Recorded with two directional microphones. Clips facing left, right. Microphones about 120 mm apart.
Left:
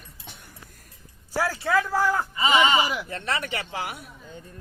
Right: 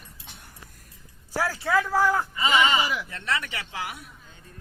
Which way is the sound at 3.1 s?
30° left (ahead or behind).